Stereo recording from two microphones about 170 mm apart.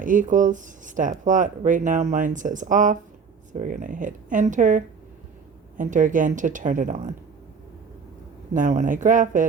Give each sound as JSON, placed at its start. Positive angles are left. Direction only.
{"t": 0.0, "sound": "speech", "side_deg": -50}
{"t": 8.5, "sound": "speech", "side_deg": -50}